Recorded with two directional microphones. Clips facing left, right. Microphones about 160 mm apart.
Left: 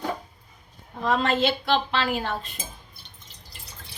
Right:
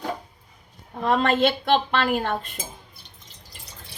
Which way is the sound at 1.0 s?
55° right (ahead or behind).